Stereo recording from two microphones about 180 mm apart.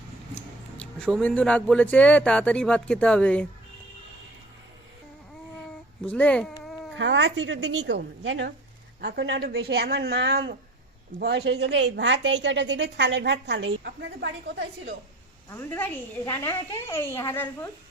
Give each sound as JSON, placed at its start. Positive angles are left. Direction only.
{"t": 0.8, "sound": "speech", "side_deg": 5}
{"t": 6.1, "sound": "speech", "side_deg": 5}
{"t": 6.9, "sound": "a woman's voice", "side_deg": -90}
{"t": 9.0, "sound": "a woman's voice", "side_deg": -65}
{"t": 15.4, "sound": "a woman's voice", "side_deg": 10}